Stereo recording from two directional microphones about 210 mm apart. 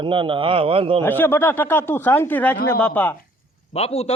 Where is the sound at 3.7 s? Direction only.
30° left (ahead or behind).